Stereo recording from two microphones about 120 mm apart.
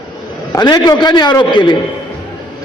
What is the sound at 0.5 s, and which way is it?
A man's voice, 35° left (ahead or behind).